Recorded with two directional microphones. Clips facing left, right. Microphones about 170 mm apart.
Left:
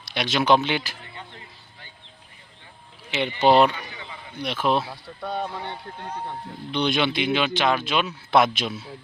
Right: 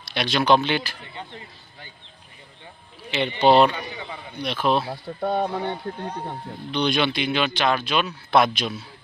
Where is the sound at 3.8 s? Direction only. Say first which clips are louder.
Right 5 dB; 20° right (ahead or behind).